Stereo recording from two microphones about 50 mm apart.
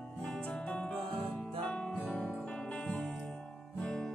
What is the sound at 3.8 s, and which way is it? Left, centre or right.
Guitar, centre.